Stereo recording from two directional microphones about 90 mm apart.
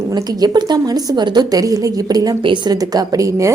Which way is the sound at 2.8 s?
45° right (ahead or behind).